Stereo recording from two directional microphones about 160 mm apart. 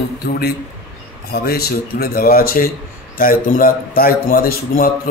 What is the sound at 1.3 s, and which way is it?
Speech, 85° left.